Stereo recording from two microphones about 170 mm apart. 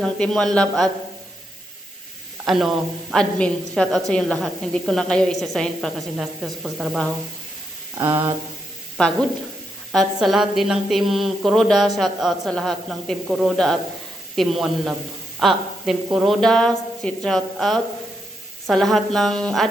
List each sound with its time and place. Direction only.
0.0 s a woman's voice: 5° left (ahead or behind)
2.5 s a woman's voice: centre (ahead or behind)
7.9 s a sound: 30° right (ahead or behind)
9.9 s a woman's voice: centre (ahead or behind)